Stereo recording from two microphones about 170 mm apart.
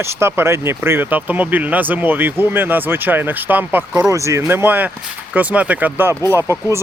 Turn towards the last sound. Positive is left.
turn(degrees=-15)  # may be behind; listen again after turning